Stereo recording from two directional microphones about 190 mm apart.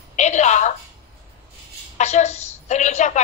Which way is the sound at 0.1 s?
40° left (ahead or behind).